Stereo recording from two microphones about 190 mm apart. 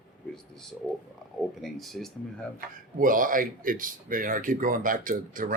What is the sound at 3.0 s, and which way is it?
Speech, 45° right (ahead or behind).